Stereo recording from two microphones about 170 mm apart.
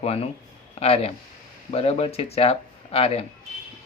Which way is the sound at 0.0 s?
35° left (ahead or behind).